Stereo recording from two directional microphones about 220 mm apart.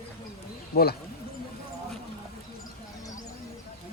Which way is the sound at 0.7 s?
45° left (ahead or behind).